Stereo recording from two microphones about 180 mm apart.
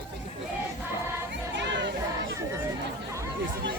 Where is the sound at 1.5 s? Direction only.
90° right.